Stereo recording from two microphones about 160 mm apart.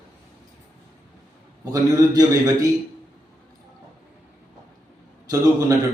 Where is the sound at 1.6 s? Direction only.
25° right (ahead or behind).